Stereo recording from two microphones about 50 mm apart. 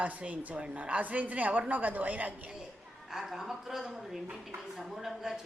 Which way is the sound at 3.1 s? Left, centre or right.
Centre.